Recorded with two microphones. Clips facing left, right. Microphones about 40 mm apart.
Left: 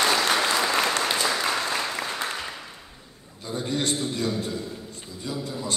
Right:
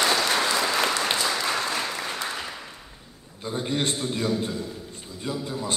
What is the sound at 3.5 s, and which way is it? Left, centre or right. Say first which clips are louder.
Speech: even; right.